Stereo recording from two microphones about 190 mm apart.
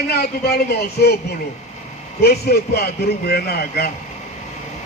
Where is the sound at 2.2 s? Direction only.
55° left (ahead or behind).